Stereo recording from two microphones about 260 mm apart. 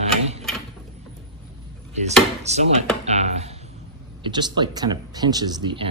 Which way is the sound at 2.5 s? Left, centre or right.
Right.